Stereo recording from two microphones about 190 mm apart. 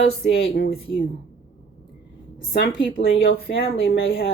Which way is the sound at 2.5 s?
60° left (ahead or behind).